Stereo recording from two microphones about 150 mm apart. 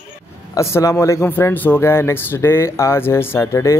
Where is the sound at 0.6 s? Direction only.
20° left (ahead or behind).